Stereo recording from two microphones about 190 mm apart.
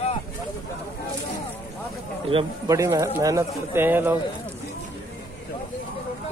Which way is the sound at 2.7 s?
15° right (ahead or behind).